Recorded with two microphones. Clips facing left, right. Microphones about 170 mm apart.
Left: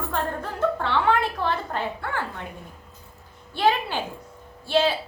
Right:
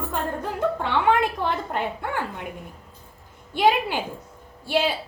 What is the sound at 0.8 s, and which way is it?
A woman's voice, 15° right (ahead or behind).